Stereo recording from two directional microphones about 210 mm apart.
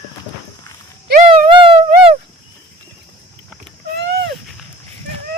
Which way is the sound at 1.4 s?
25° right (ahead or behind).